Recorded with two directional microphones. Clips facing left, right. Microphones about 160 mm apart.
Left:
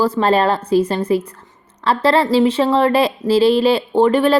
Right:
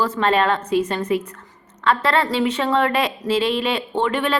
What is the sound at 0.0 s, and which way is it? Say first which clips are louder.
A woman's voice: left 4 dB; 35° left (ahead or behind).